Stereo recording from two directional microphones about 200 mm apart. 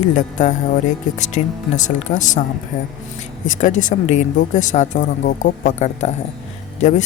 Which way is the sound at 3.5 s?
40° left (ahead or behind).